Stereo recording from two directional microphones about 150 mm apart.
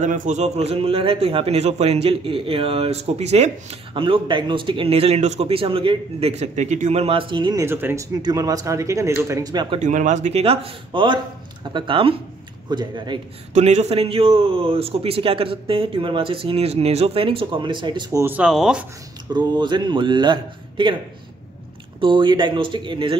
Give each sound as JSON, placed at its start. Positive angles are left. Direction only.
{"t": 0.0, "sound": "a man's voice", "side_deg": -60}
{"t": 7.6, "sound": "speech", "side_deg": -15}
{"t": 9.8, "sound": "a man's voice", "side_deg": -55}
{"t": 13.5, "sound": "a man's voice", "side_deg": -50}
{"t": 18.2, "sound": "speech", "side_deg": -10}
{"t": 19.3, "sound": "a man's voice", "side_deg": -30}
{"t": 22.0, "sound": "a man's voice", "side_deg": -30}